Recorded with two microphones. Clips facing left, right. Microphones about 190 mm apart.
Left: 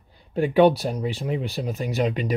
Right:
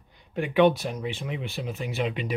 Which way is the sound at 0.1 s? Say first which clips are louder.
Left 7 dB; 35° left (ahead or behind).